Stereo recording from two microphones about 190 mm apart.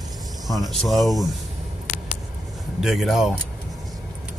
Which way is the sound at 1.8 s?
40° left (ahead or behind).